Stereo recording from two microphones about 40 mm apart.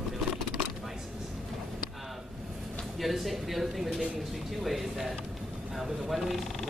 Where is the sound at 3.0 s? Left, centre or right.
Centre.